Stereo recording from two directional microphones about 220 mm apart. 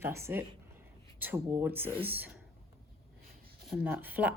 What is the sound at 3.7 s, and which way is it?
Speech, 5° right (ahead or behind).